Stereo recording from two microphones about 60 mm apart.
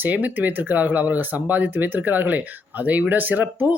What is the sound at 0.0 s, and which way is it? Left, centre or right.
Speech, right.